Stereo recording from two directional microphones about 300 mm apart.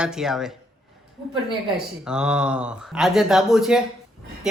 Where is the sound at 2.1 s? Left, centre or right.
Centre.